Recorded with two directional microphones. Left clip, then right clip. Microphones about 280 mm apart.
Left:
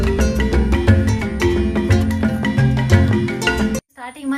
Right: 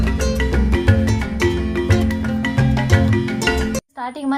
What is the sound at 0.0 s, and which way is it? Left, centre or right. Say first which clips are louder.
Music: left 2 dB; centre.